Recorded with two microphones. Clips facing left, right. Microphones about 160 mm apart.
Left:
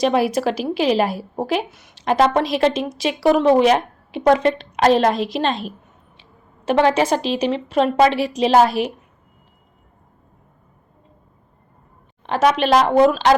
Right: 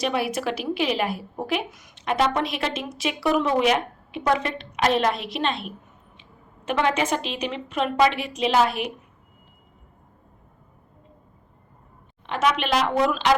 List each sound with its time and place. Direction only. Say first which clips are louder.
0.0 s a woman's voice: left 7 dB; 35° left (ahead or behind)
12.2 s a woman's voice: left 6 dB; 35° left (ahead or behind)